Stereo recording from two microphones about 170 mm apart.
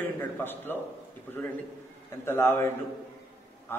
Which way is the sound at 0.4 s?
10° left (ahead or behind).